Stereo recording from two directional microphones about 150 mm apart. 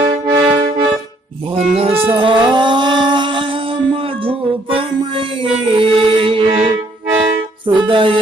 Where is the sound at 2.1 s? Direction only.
35° right (ahead or behind).